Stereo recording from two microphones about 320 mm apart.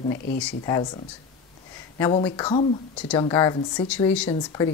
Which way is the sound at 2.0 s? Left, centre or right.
Centre.